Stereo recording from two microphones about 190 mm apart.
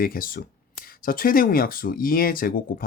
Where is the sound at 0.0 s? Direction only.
50° left (ahead or behind).